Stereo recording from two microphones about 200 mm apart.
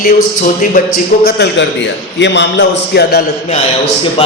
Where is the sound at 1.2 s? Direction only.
55° left (ahead or behind).